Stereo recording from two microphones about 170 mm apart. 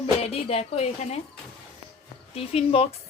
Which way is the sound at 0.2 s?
35° left (ahead or behind).